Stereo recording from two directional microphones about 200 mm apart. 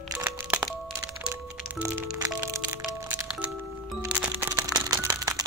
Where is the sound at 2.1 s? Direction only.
5° right (ahead or behind).